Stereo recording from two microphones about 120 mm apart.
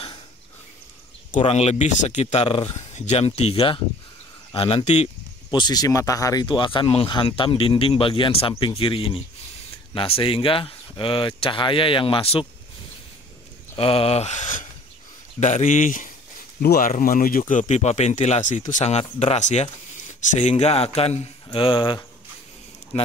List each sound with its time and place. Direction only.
1.4 s speech: 60° left (ahead or behind)
5.5 s speech: 35° left (ahead or behind)
13.7 s speech: 55° left (ahead or behind); by 14.7 s 90° left
15.4 s speech: 80° left
17.5 s speech: 85° left
19.1 s speech: 65° left (ahead or behind)
21.5 s speech: 45° left (ahead or behind)